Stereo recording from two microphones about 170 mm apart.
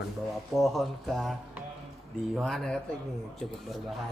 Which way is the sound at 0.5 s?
Centre (ahead or behind).